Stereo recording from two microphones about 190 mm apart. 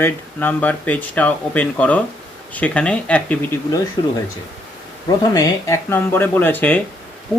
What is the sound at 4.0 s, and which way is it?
Speech, 25° left (ahead or behind).